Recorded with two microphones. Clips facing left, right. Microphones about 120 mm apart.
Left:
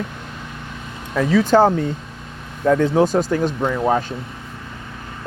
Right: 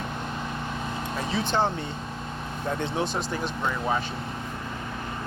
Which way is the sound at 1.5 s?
70° left (ahead or behind).